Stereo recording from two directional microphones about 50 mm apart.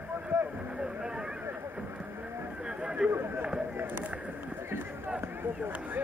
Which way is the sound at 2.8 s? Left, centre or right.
Right.